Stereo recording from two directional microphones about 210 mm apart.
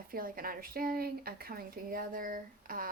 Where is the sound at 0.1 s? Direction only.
45° right (ahead or behind).